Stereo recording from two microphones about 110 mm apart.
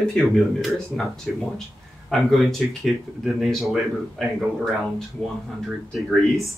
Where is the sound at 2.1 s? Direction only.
Centre (ahead or behind).